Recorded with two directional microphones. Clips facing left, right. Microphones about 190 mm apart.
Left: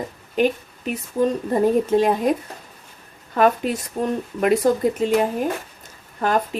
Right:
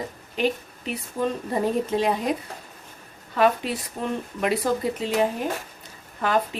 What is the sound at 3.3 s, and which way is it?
Speech, 45° left (ahead or behind).